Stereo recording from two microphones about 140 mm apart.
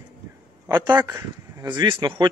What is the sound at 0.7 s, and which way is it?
Speech, 25° right (ahead or behind).